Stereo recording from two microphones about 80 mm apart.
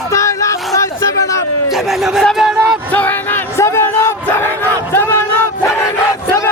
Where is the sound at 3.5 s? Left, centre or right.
Left.